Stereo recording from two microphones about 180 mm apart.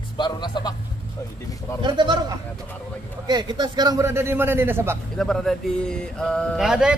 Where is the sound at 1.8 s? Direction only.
25° right (ahead or behind).